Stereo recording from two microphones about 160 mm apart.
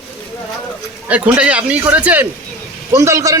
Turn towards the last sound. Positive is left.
turn(degrees=-20)  # may be behind; listen again after turning